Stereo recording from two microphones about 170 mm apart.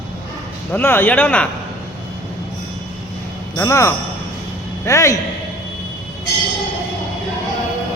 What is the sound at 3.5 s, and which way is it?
A man's voice, 15° left (ahead or behind).